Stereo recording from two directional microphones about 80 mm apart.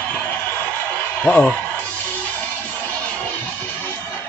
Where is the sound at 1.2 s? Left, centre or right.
Centre.